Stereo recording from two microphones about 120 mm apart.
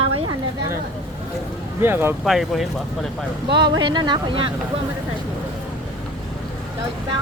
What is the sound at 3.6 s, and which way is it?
Speech, 40° right (ahead or behind).